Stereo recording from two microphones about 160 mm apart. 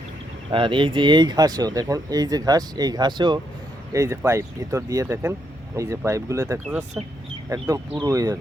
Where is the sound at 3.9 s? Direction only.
20° right (ahead or behind).